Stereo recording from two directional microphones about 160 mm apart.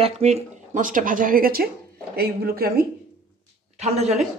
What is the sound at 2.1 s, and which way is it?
Speech, 75° right (ahead or behind).